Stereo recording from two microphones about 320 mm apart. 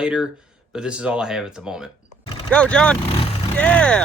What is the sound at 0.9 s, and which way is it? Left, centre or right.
Speech, centre.